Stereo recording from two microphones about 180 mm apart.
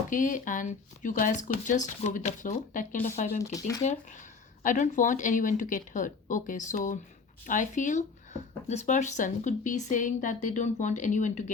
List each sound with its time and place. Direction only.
0.1 s speech: 45° left (ahead or behind)
3.5 s speech: 20° left (ahead or behind)
3.8 s speech: 45° left (ahead or behind)